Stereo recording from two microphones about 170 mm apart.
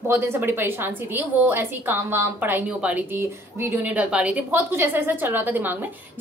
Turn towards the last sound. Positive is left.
turn(degrees=-10)  # may be behind; listen again after turning